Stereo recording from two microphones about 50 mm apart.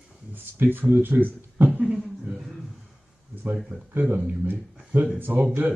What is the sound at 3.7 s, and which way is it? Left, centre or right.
Speech, left.